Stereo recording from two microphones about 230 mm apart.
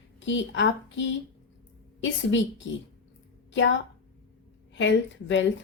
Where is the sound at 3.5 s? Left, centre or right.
Left.